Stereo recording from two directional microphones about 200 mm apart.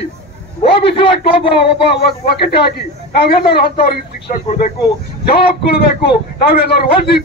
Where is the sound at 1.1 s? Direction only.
55° left (ahead or behind).